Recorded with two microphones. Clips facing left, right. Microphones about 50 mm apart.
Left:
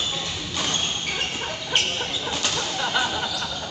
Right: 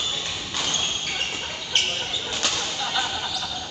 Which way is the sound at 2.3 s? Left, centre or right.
Centre.